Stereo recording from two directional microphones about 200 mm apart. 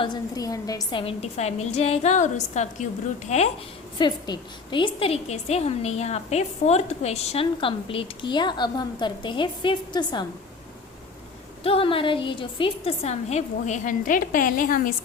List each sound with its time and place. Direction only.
0.0 s a woman's voice: 20° left (ahead or behind)
3.9 s a woman's voice: 25° left (ahead or behind)
11.6 s a woman's voice: 25° left (ahead or behind); by 14.9 s 45° left (ahead or behind)